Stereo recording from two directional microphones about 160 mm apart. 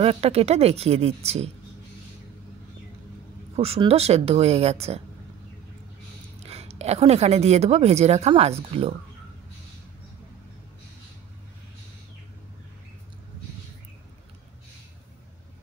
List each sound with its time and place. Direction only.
0.0 s speech: 40° right (ahead or behind)
3.5 s speech: 40° right (ahead or behind)
6.4 s speech: 40° right (ahead or behind)